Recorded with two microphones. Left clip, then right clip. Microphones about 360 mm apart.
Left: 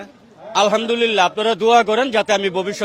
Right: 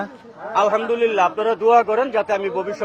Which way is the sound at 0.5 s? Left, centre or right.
Left.